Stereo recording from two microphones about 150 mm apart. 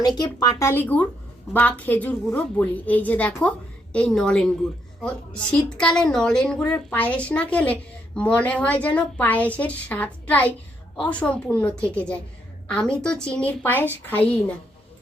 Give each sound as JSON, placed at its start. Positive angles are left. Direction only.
{"t": 0.2, "sound": "a woman's voice", "side_deg": 25}